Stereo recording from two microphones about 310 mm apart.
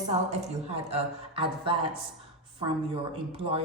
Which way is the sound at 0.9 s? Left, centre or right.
Centre.